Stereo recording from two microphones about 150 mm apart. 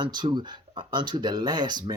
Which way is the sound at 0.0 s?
30° right (ahead or behind).